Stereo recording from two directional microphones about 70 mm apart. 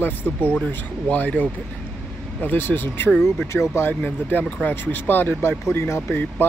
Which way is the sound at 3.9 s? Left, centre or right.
Left.